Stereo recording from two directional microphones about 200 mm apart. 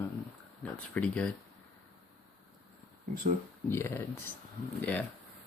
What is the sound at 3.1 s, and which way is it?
Speech, 45° right (ahead or behind).